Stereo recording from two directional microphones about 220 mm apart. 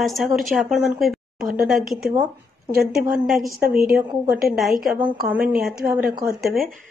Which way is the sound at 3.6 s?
40° right (ahead or behind).